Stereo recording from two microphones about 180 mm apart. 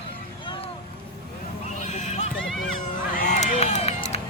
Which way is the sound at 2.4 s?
5° left (ahead or behind).